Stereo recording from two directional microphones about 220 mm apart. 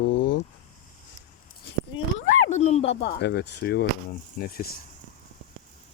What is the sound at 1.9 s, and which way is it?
Speech, 20° left (ahead or behind).